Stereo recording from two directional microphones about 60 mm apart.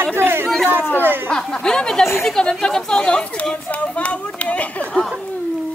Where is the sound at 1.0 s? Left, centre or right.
Right.